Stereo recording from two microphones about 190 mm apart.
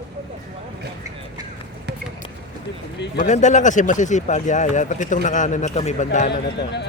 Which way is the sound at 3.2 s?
40° left (ahead or behind).